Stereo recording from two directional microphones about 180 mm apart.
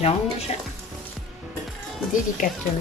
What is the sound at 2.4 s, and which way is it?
Speech, 50° left (ahead or behind).